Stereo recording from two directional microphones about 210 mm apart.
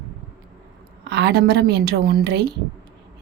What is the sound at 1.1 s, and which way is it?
A woman's voice, 55° right (ahead or behind).